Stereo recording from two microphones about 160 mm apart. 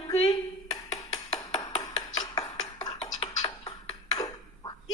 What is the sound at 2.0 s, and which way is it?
Music, 20° left (ahead or behind).